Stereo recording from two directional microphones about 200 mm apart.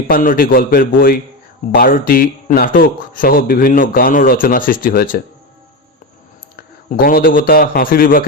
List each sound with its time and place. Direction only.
0.1 s speech: 45° left (ahead or behind)
6.6 s a man's voice: 50° left (ahead or behind)